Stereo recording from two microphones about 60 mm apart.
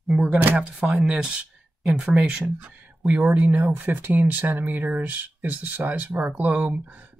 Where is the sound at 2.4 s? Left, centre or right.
Right.